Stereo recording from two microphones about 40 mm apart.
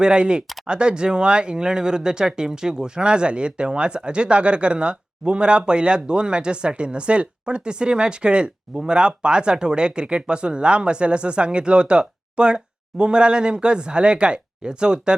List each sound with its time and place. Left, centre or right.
0.0 s speech: right